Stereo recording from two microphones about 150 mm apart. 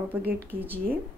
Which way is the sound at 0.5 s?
40° right (ahead or behind).